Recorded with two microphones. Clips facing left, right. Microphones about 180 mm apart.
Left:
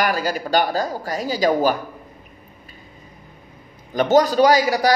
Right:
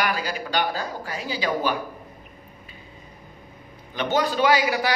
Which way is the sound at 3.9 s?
40° left (ahead or behind).